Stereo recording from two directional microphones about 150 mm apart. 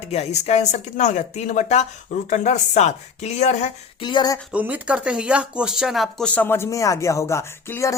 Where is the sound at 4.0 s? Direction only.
30° left (ahead or behind).